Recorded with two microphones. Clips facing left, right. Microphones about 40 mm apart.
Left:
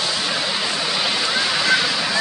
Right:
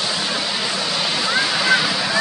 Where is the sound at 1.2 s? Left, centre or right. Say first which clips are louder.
Right 1 dB; centre.